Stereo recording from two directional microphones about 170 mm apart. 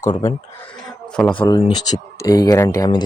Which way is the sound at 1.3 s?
30° left (ahead or behind).